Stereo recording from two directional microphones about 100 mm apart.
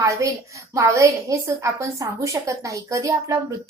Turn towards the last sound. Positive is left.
turn(degrees=-30)  # may be behind; listen again after turning